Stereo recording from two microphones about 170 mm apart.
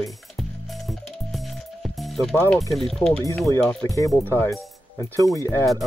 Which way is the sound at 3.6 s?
5° left (ahead or behind).